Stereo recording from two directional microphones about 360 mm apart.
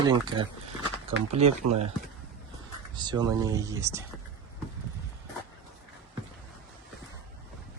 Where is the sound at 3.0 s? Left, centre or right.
Centre.